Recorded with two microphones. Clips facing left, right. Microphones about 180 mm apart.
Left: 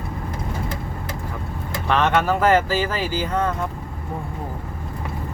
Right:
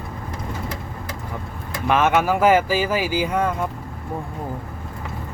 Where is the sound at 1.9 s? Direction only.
10° right (ahead or behind).